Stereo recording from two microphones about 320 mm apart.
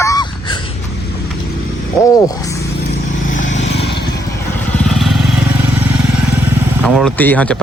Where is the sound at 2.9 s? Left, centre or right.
Left.